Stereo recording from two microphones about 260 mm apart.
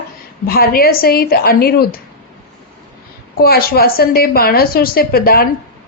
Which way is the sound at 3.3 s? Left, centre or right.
Left.